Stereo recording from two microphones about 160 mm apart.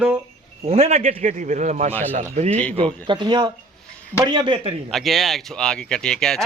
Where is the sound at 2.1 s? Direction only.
45° right (ahead or behind).